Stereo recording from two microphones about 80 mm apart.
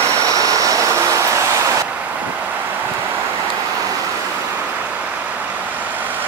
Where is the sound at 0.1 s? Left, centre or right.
Right.